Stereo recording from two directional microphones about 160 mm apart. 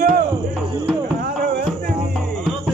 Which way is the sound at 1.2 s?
75° right (ahead or behind).